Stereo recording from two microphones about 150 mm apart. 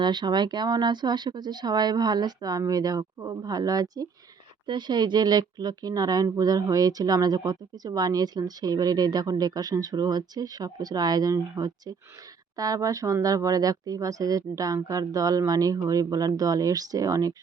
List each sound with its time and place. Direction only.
0.0 s speech: 30° right (ahead or behind)